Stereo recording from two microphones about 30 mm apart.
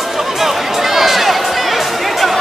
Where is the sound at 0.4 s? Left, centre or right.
Centre.